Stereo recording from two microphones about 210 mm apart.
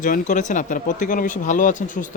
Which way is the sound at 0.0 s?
35° left (ahead or behind).